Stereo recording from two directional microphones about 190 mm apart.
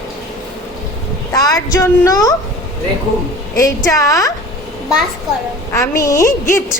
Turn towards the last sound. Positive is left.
turn(degrees=15)  # may be behind; listen again after turning